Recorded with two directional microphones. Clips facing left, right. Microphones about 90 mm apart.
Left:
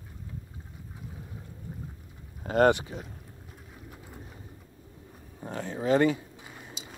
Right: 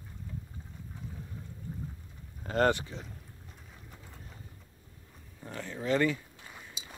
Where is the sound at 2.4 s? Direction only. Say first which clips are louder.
Left 5 dB; 15° left (ahead or behind).